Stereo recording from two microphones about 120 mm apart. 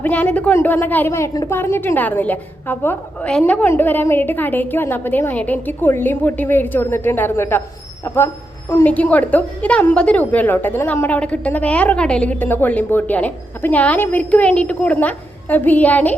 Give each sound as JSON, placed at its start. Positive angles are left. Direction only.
{"t": 0.0, "sound": "a woman's voice", "side_deg": 15}